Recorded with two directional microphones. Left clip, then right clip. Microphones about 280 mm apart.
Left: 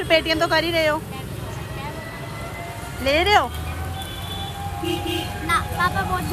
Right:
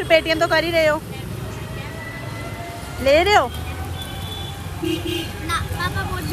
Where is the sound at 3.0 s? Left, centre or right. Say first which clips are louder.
Right 3 dB; centre.